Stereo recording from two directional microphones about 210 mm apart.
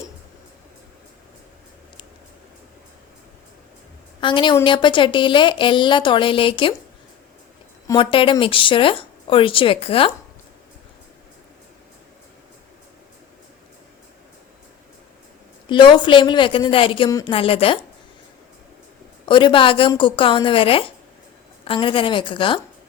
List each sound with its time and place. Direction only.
4.2 s a woman's voice: 25° left (ahead or behind)
7.9 s a woman's voice: 25° left (ahead or behind)
15.7 s a woman's voice: 25° left (ahead or behind)
19.2 s a woman's voice: 25° left (ahead or behind)